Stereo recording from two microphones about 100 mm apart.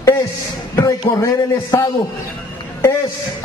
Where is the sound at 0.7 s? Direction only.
30° left (ahead or behind).